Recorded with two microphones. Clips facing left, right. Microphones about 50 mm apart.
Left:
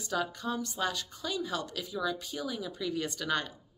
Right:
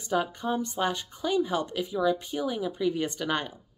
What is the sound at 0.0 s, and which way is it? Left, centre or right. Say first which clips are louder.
A woman's voice: right 5 dB; right.